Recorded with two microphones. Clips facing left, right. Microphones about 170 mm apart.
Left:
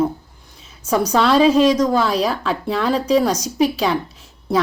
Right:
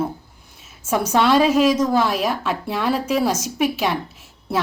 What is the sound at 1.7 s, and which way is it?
Speech, 5° right (ahead or behind).